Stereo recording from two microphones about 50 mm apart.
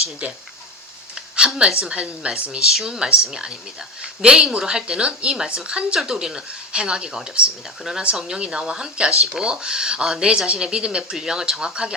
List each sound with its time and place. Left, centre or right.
0.0 s a woman's voice: right
1.1 s a sound: centre
1.9 s a woman's voice: right
2.5 s speech: centre
9.0 s speech: centre
9.4 s speech: centre